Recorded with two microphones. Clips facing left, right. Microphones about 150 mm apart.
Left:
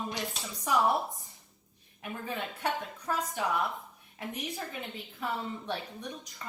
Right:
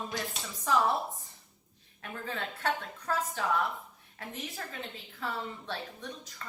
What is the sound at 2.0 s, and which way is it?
A woman's voice, 15° left (ahead or behind).